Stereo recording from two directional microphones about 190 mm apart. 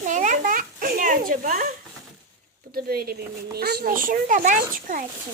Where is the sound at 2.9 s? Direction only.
55° right (ahead or behind).